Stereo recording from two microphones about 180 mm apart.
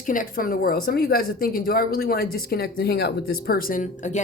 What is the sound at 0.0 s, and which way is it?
A woman's voice, 50° left (ahead or behind).